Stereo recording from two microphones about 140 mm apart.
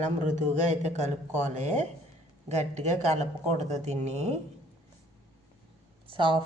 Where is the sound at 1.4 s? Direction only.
55° right (ahead or behind).